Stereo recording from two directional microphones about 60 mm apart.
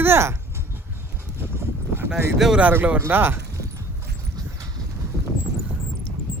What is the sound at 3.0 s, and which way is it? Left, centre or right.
Speech, right.